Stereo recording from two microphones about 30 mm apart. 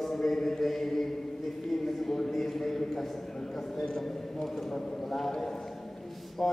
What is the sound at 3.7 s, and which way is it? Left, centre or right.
A man's voice, centre.